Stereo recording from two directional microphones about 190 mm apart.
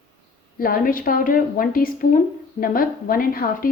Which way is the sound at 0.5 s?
50° left (ahead or behind).